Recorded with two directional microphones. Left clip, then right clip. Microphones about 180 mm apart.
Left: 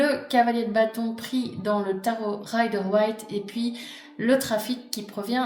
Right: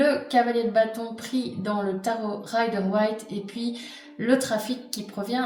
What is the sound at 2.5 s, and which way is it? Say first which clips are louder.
A woman's voice: left 1 dB; 45° left (ahead or behind).